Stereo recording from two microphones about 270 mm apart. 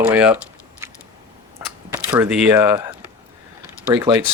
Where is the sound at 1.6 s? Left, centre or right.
Centre.